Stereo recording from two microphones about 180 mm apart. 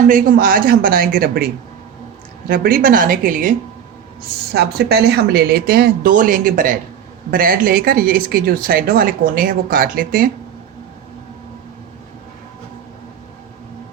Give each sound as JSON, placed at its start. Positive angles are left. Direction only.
{"t": 0.1, "sound": "speech", "side_deg": -50}
{"t": 2.5, "sound": "speech", "side_deg": -55}
{"t": 4.5, "sound": "speech", "side_deg": -60}